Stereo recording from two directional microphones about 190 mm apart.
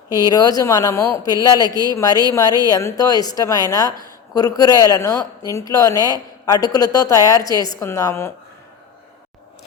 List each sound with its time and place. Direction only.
0.1 s speech: 20° left (ahead or behind)